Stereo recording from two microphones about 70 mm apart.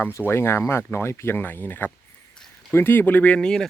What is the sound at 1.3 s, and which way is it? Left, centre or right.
A man's voice, left.